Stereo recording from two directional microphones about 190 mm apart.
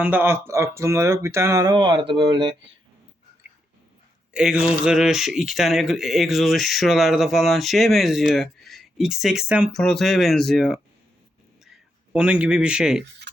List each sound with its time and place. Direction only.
0.0 s speech: 10° right (ahead or behind); by 2.6 s 25° right (ahead or behind)
4.4 s speech: 5° right (ahead or behind)
12.1 s speech: 5° right (ahead or behind)
13.3 s stir: 65° right (ahead or behind)